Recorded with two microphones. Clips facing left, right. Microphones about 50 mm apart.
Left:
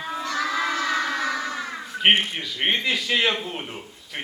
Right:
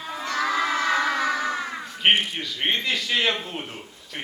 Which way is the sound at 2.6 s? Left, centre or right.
Centre.